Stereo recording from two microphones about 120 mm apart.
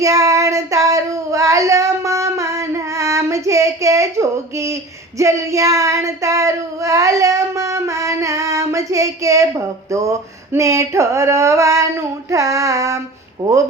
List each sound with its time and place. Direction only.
0.0 s child singing: 25° right (ahead or behind)
13.4 s speech: 25° right (ahead or behind)